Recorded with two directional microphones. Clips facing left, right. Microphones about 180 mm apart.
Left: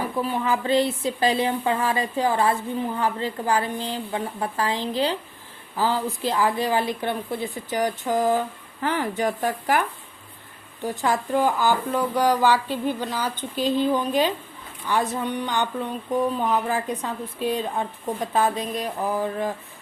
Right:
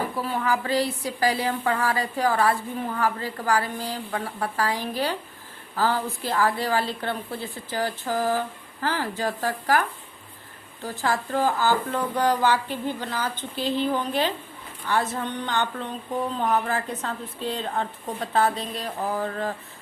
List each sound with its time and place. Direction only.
0.2 s speech: 20° left (ahead or behind)
10.8 s speech: 20° left (ahead or behind)